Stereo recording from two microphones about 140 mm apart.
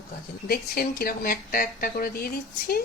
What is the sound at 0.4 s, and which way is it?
A woman's voice, 90° left.